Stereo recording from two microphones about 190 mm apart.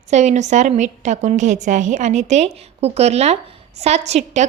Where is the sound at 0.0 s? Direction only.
35° right (ahead or behind).